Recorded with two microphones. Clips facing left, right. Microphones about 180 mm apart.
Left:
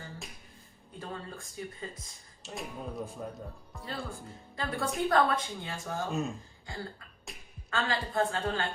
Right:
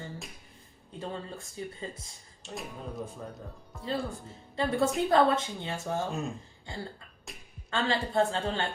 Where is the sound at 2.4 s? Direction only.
Centre (ahead or behind).